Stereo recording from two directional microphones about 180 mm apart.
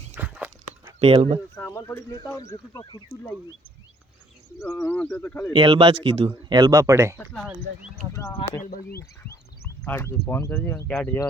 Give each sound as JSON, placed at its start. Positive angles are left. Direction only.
{"t": 0.1, "sound": "dog", "side_deg": -10}
{"t": 0.9, "sound": "speech", "side_deg": -35}
{"t": 1.5, "sound": "speech", "side_deg": 15}
{"t": 4.7, "sound": "speech", "side_deg": 10}
{"t": 5.5, "sound": "speech", "side_deg": -25}
{"t": 6.6, "sound": "speech", "side_deg": -20}
{"t": 7.2, "sound": "speech", "side_deg": 0}
{"t": 9.8, "sound": "speech", "side_deg": 15}